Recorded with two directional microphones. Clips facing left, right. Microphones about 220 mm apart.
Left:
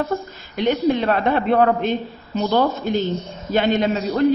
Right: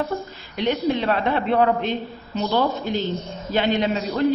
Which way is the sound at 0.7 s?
50° left (ahead or behind).